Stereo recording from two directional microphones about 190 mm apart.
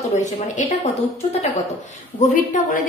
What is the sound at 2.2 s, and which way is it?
Speech, 40° left (ahead or behind).